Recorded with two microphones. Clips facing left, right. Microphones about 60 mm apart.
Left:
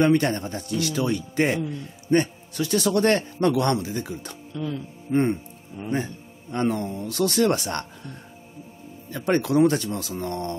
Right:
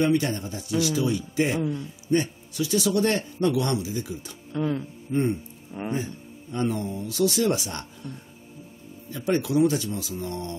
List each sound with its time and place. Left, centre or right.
0.0 s speech: left
4.5 s speech: right
5.1 s speech: left
5.8 s a man's voice: right
6.5 s speech: left
9.1 s speech: left